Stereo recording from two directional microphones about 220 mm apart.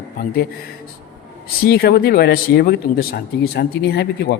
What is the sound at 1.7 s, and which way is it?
Speech, 45° left (ahead or behind).